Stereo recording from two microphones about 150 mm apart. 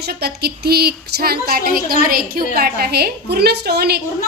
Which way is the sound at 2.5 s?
90° right.